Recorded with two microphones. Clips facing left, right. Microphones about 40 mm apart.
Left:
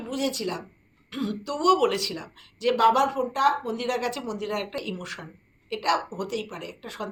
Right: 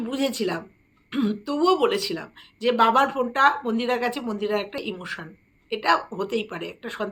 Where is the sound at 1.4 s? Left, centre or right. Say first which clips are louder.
Even; centre; by 3.7 s right.